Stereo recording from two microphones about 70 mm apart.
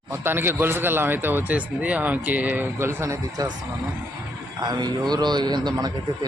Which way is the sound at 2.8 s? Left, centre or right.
Right.